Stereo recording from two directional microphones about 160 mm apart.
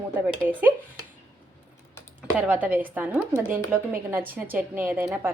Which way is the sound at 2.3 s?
10° right (ahead or behind).